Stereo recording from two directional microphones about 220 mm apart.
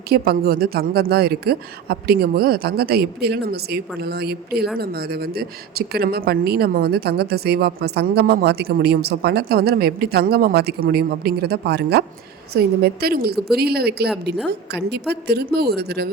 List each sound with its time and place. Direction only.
0.1 s speech: 45° right (ahead or behind)